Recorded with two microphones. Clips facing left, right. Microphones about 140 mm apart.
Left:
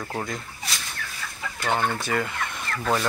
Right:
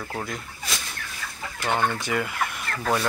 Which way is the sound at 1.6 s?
15° right (ahead or behind).